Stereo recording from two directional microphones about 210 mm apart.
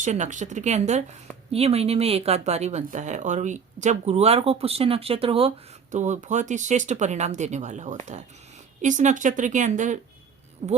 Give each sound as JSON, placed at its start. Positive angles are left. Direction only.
{"t": 0.0, "sound": "a woman's voice", "side_deg": -35}